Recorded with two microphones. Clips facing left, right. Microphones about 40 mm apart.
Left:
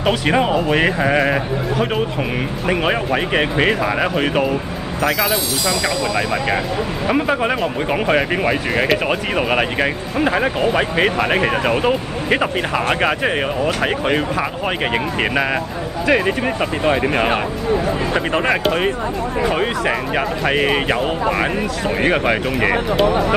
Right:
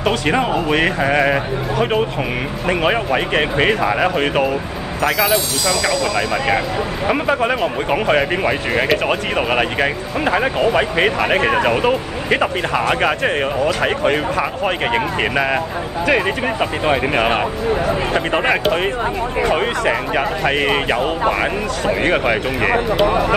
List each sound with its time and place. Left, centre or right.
0.1 s speech: centre
18.5 s speech: centre
22.1 s speech: centre
23.0 s speech: right